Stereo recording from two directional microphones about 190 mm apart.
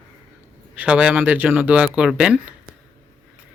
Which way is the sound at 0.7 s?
5° right (ahead or behind).